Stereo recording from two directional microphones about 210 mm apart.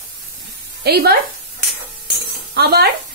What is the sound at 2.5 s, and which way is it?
Speech, 50° right (ahead or behind).